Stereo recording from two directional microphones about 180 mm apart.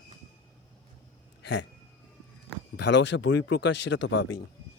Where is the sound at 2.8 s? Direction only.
75° left (ahead or behind).